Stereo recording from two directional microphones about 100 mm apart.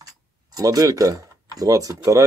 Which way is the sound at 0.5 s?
40° right (ahead or behind).